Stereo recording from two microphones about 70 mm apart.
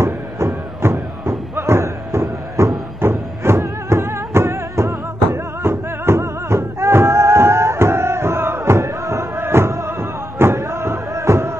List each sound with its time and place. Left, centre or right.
0.0 s music: right